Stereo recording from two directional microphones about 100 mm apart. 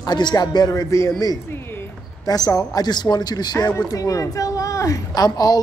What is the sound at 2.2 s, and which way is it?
A woman's voice, 40° left (ahead or behind).